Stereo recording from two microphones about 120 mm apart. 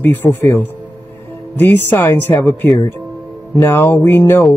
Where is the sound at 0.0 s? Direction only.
15° left (ahead or behind).